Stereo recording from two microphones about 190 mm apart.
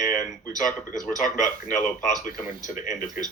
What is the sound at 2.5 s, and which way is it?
Speech, 20° right (ahead or behind).